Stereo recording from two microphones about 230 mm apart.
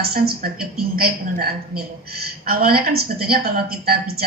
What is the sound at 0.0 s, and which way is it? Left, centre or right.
A woman's voice, right.